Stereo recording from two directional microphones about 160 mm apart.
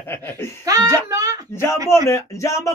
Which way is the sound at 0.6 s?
25° right (ahead or behind).